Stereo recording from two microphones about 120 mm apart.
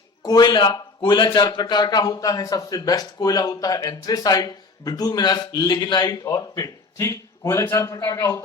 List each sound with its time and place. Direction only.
0.2 s a man's voice: 35° left (ahead or behind)